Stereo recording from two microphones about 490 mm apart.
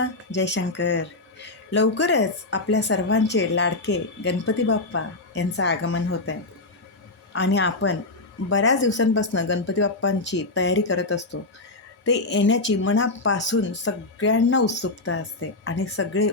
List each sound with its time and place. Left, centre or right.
0.0 s speech: left
7.3 s speech: left